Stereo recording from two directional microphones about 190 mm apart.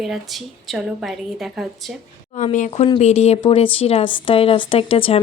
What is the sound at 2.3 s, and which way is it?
Speech, 40° left (ahead or behind).